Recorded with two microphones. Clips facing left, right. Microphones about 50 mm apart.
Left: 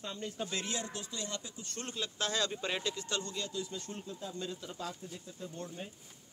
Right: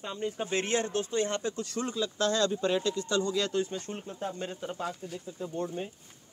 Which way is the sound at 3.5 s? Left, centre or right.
Right.